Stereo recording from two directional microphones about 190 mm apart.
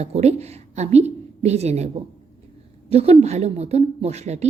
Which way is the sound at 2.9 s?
35° right (ahead or behind).